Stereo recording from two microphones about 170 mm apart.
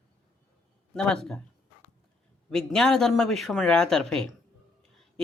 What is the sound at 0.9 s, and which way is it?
Speech, 5° left (ahead or behind).